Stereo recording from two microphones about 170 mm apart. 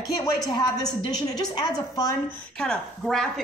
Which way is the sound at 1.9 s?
20° left (ahead or behind).